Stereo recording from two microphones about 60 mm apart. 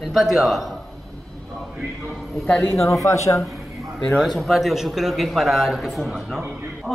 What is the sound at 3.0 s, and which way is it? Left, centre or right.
Speech, left.